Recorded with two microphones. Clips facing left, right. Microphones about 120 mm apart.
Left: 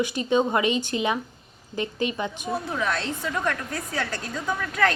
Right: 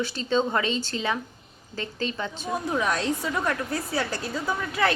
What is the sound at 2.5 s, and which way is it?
A woman's voice, 15° right (ahead or behind).